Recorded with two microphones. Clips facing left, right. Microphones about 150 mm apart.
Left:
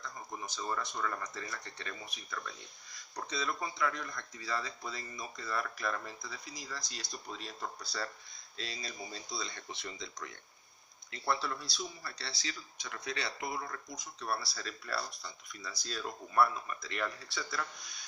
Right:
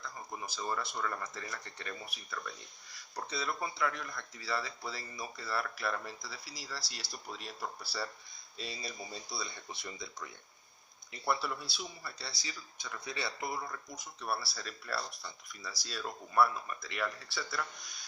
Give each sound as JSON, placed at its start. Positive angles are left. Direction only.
{"t": 0.4, "sound": "speech", "side_deg": -10}
{"t": 11.1, "sound": "speech", "side_deg": -10}
{"t": 12.3, "sound": "speech", "side_deg": 25}
{"t": 14.2, "sound": "speech", "side_deg": -5}